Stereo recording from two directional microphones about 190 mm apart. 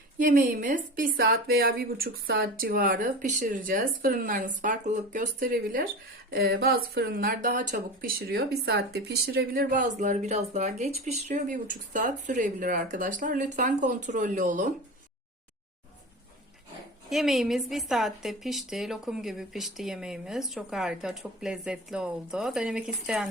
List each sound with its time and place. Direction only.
0.2 s speech: 45° right (ahead or behind)
17.1 s a woman's voice: centre (ahead or behind)